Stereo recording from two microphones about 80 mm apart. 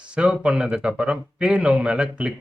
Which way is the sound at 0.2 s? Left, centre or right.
Centre.